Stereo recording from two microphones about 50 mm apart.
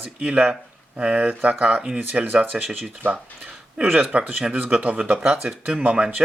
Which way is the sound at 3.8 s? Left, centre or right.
Right.